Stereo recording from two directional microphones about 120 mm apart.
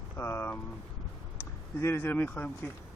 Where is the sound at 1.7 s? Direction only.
20° left (ahead or behind).